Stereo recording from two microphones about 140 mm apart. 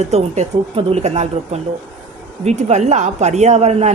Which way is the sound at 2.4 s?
50° right (ahead or behind).